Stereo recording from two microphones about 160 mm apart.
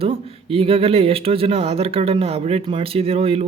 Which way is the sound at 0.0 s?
35° right (ahead or behind).